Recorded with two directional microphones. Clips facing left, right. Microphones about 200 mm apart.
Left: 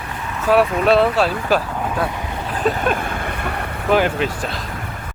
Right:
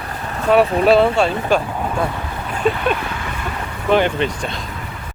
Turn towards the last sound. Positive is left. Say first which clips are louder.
# right 1 dB
turn(degrees=5)  # may be behind; listen again after turning